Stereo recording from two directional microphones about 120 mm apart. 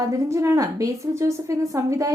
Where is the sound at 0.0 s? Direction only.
25° right (ahead or behind).